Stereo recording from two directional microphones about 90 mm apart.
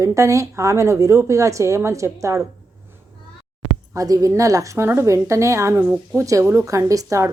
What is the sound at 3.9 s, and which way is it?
A woman's voice, 40° right (ahead or behind).